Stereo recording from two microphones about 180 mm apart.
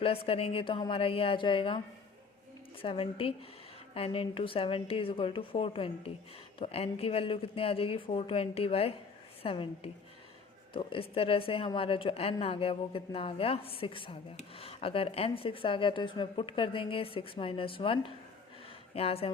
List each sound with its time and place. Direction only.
0.0 s speech: 30° left (ahead or behind)
2.8 s a woman's voice: 30° left (ahead or behind)